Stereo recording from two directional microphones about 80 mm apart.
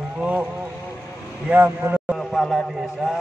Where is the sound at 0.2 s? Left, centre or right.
Centre.